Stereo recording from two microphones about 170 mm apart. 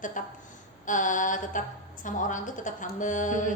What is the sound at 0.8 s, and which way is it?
Speech, 50° left (ahead or behind).